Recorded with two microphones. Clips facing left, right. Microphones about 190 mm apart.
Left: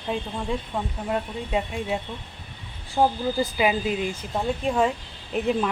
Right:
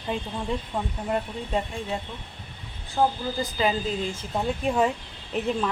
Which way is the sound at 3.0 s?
15° left (ahead or behind).